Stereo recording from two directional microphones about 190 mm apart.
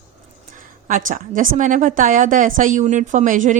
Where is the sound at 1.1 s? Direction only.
45° right (ahead or behind).